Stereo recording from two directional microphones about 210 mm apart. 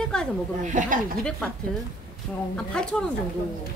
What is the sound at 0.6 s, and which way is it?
Speech, 35° right (ahead or behind).